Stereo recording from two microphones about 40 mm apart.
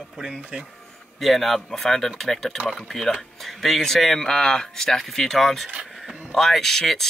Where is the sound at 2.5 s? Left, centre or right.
Right.